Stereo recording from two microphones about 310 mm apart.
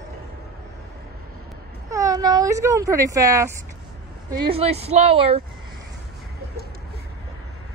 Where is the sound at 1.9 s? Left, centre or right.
Centre.